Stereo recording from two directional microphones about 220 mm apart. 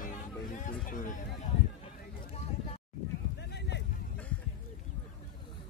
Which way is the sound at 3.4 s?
50° left (ahead or behind).